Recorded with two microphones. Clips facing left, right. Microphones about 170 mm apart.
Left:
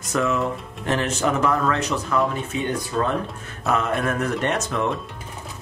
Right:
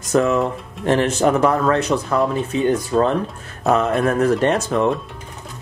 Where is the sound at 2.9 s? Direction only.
35° right (ahead or behind).